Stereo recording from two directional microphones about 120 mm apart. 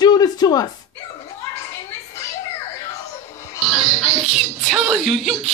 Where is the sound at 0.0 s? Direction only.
35° left (ahead or behind).